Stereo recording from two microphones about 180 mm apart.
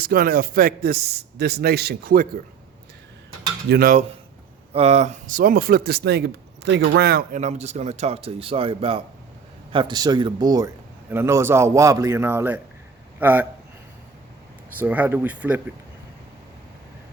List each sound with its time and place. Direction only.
0.0 s speech: 55° right (ahead or behind)
3.7 s speech: 55° right (ahead or behind)
4.7 s speech: 35° right (ahead or behind); by 7.3 s 60° right (ahead or behind)
7.3 s a man's voice: 40° right (ahead or behind); by 13.5 s 10° right (ahead or behind)
14.8 s a man's voice: 10° right (ahead or behind)